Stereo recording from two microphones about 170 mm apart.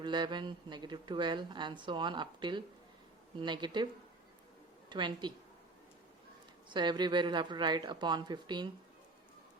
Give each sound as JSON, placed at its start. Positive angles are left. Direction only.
{"t": 0.0, "sound": "a woman's voice", "side_deg": -25}
{"t": 4.9, "sound": "a woman's voice", "side_deg": -25}
{"t": 6.7, "sound": "a woman's voice", "side_deg": -25}